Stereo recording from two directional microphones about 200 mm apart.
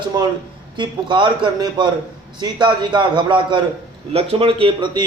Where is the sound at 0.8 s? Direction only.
25° right (ahead or behind).